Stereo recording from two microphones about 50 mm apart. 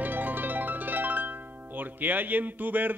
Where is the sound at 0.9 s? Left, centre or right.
Right.